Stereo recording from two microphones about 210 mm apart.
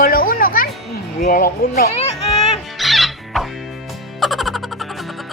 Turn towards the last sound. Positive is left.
turn(degrees=0)  # may be behind; listen again after turning